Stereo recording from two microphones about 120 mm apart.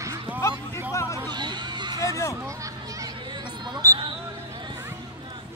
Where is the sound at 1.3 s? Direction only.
40° right (ahead or behind).